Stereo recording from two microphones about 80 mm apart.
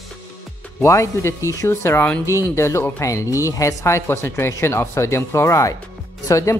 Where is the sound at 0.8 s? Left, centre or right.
Left.